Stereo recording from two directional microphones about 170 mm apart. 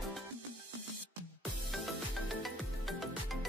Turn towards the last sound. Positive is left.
turn(degrees=0)  # may be behind; listen again after turning